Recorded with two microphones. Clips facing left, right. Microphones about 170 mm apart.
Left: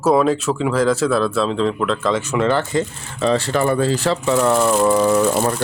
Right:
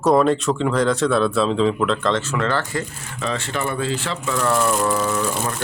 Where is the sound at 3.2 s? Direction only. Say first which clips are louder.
Left 8 dB; 35° left (ahead or behind).